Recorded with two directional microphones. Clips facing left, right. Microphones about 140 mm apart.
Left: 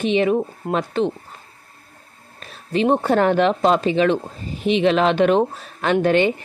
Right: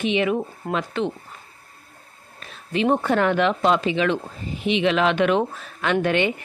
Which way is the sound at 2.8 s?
35° left (ahead or behind).